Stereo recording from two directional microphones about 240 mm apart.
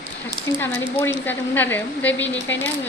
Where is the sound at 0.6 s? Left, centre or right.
Centre.